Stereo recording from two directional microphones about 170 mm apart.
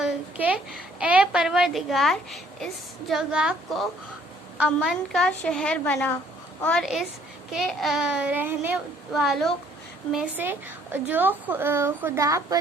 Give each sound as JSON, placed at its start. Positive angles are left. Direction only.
{"t": 0.0, "sound": "a child's voice", "side_deg": -10}